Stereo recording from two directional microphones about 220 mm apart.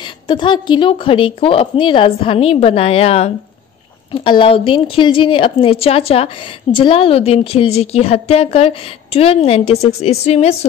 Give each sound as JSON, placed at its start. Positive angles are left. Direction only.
{"t": 0.0, "sound": "a woman's voice", "side_deg": 20}